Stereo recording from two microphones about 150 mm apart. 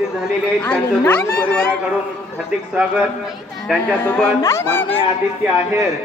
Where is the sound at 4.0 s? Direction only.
15° left (ahead or behind).